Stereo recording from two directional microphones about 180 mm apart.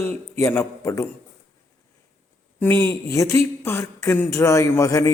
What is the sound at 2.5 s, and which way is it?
Speech, 10° left (ahead or behind).